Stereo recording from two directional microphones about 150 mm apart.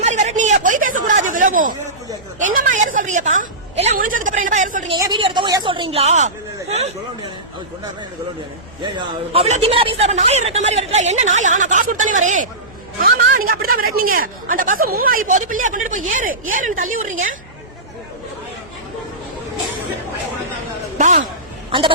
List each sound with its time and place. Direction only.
0.0 s chatter: 50° right (ahead or behind)
2.6 s music: 60° right (ahead or behind)
3.9 s a woman's voice: 65° right (ahead or behind)
4.9 s a woman's voice: 30° right (ahead or behind); by 6.3 s 50° right (ahead or behind)
8.8 s a man's voice: 35° right (ahead or behind); by 12.5 s 55° right (ahead or behind)
13.0 s speech: 80° right; by 17.3 s 60° right (ahead or behind)
21.0 s speech: 55° right (ahead or behind)
21.7 s speech: 35° right (ahead or behind)